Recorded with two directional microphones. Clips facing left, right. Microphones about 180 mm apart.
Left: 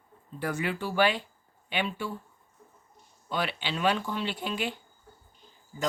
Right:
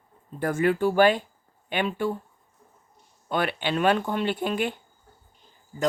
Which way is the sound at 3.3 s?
55° right (ahead or behind).